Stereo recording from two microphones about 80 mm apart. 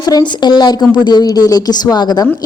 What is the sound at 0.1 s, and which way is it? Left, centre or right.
A woman's voice, left.